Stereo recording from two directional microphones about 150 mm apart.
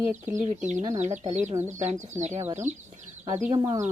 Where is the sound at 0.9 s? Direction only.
50° right (ahead or behind).